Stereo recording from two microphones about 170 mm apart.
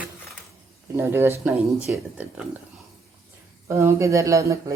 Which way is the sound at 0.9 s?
15° right (ahead or behind).